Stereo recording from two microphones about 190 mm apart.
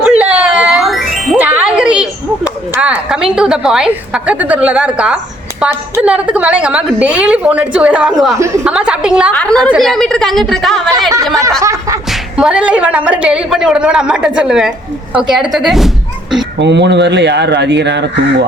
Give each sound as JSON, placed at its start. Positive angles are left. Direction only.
{"t": 0.0, "sound": "music", "side_deg": -5}
{"t": 2.7, "sound": "a woman's voice", "side_deg": -5}
{"t": 8.4, "sound": "a woman's voice", "side_deg": -10}
{"t": 9.3, "sound": "a woman's voice", "side_deg": 5}
{"t": 11.6, "sound": "music", "side_deg": -15}
{"t": 12.1, "sound": "a woman's voice", "side_deg": -5}
{"t": 16.6, "sound": "speech", "side_deg": -65}